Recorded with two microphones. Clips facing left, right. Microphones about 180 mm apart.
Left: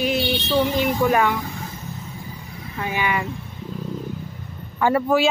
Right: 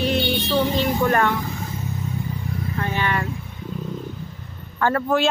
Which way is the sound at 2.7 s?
10° left (ahead or behind).